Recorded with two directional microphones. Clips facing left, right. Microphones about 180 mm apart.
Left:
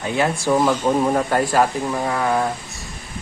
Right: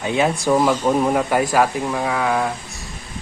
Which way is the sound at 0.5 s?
Centre (ahead or behind).